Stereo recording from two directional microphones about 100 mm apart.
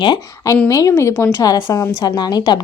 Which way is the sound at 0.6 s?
35° left (ahead or behind).